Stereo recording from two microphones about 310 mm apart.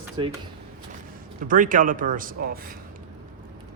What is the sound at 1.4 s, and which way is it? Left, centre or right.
A man's voice, right.